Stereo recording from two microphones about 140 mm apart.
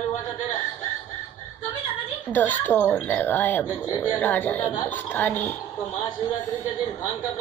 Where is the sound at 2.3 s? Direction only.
15° left (ahead or behind).